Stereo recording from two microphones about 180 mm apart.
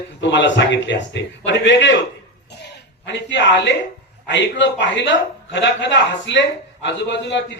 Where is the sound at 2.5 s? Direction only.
75° left (ahead or behind).